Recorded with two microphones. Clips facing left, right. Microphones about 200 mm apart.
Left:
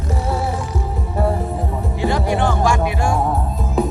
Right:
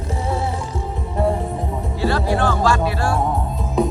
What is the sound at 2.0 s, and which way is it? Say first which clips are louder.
Music: left 1 dB; 15° left (ahead or behind).